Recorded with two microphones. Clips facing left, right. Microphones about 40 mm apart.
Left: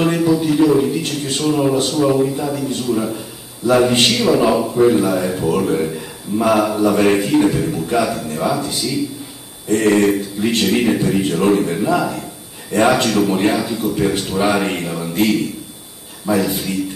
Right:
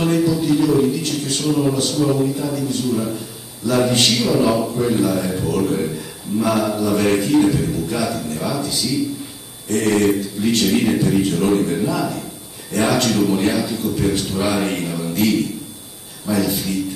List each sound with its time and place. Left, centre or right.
0.0 s a man's voice: left
1.0 s a man's voice: left
1.4 s a man's voice: centre
16.3 s a man's voice: left